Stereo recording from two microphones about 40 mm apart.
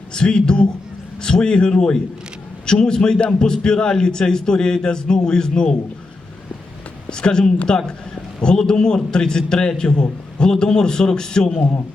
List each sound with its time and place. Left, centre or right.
0.1 s a man's voice: left
7.1 s a man's voice: left